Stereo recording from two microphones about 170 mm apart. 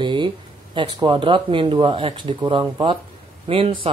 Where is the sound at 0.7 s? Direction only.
30° right (ahead or behind).